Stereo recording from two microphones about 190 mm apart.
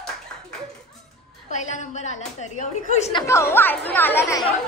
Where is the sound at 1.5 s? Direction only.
40° left (ahead or behind).